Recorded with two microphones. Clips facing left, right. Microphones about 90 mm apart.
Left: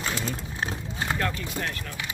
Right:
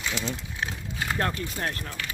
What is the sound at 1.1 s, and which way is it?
Speech, 35° right (ahead or behind).